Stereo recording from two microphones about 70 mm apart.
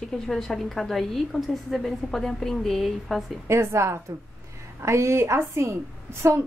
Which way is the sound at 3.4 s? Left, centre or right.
Right.